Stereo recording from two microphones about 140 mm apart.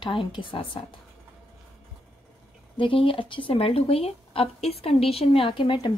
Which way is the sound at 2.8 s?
40° left (ahead or behind).